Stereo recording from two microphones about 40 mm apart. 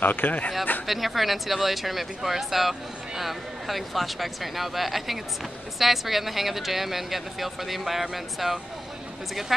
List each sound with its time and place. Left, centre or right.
0.0 s speech: left
0.8 s speech: centre